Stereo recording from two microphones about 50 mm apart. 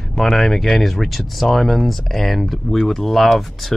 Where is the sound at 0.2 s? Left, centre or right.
Centre.